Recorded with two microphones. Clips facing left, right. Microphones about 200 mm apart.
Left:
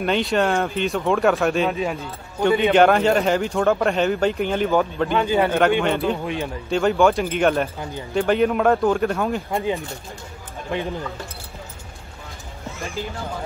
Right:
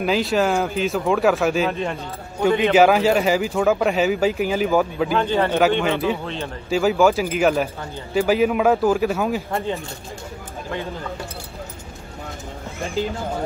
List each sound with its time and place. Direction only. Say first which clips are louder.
0.0 s speech: right 1 dB; centre (ahead or behind)
5.2 s a man's voice: left 1 dB; 10° left (ahead or behind)
6.2 s a man's voice: left 3 dB; 15° left (ahead or behind)
6.7 s speech: right 1 dB; 5° right (ahead or behind)
10.7 s a man's voice: left 3 dB; 15° left (ahead or behind)